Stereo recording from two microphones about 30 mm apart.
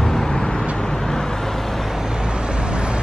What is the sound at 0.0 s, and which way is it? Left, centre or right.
Vehicle, centre.